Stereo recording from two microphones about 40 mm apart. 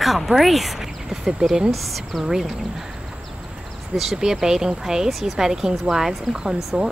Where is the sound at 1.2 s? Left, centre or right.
Centre.